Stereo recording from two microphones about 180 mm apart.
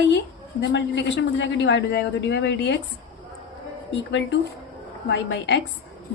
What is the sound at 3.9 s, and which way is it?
A woman's voice, 75° left (ahead or behind).